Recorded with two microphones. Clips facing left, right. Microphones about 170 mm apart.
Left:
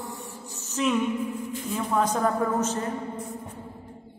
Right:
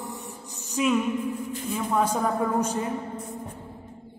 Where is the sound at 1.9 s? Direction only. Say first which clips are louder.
Even; 5° right (ahead or behind).